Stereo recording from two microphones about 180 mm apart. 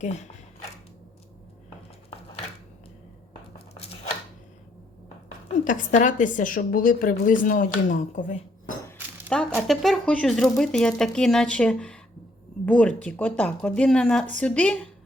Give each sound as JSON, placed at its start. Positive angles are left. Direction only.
{"t": 0.0, "sound": "speech", "side_deg": 40}
{"t": 5.6, "sound": "a woman's voice", "side_deg": 45}
{"t": 9.3, "sound": "a sound", "side_deg": 5}
{"t": 9.6, "sound": "speech", "side_deg": 0}